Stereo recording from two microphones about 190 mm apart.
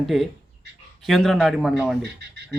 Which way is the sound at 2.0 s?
60° right (ahead or behind).